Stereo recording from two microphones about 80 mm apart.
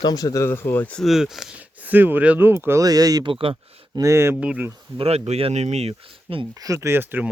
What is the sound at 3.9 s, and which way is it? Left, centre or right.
Speech, right.